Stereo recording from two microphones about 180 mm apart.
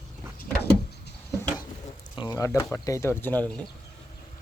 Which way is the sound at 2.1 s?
20° left (ahead or behind).